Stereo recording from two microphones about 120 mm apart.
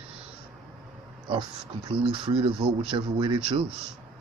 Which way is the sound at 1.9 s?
45° right (ahead or behind).